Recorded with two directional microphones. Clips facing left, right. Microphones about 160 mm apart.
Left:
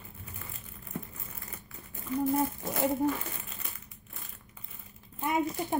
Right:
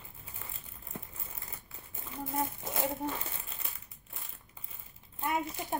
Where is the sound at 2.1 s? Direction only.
25° right (ahead or behind).